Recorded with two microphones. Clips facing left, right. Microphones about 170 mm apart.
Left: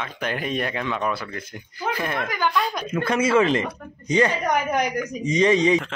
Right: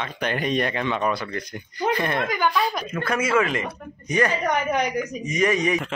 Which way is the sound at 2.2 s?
15° right (ahead or behind).